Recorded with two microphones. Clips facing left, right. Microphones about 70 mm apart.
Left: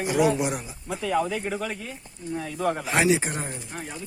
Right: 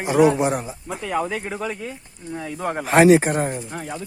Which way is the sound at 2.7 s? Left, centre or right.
Right.